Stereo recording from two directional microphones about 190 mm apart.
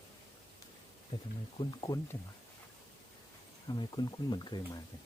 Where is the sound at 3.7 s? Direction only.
20° left (ahead or behind).